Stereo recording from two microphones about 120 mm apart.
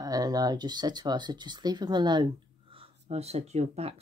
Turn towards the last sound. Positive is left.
turn(degrees=-60)  # may be behind; listen again after turning